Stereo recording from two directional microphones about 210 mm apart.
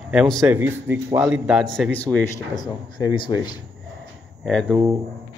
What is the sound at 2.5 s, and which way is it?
Speech, 20° left (ahead or behind).